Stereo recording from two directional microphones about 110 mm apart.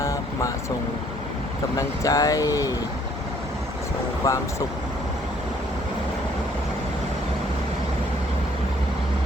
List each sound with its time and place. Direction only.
0.0 s vehicle: 30° left (ahead or behind)
1.7 s speech: 35° left (ahead or behind)
4.2 s speech: 30° left (ahead or behind)